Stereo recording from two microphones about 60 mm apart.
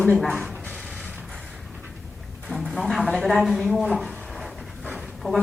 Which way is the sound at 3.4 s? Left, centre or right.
Centre.